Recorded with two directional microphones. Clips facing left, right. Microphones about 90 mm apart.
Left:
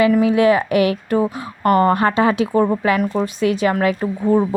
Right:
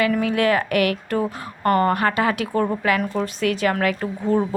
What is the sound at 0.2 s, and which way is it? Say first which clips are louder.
Speech: left 5 dB; 20° left (ahead or behind).